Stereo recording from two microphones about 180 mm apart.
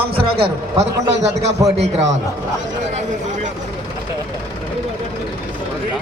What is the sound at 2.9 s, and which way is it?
Speech, 45° right (ahead or behind).